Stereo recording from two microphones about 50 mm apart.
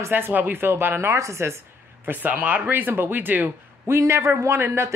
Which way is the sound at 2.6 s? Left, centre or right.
Right.